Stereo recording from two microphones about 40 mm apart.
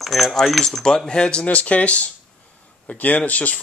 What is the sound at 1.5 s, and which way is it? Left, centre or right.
Speech, left.